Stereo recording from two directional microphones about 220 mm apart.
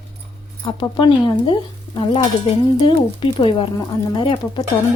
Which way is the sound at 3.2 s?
25° left (ahead or behind).